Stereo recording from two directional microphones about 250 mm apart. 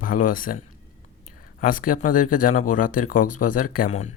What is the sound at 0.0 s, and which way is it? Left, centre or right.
Speech, left.